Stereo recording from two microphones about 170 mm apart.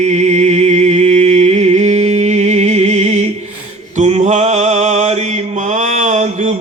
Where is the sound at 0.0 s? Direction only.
40° right (ahead or behind).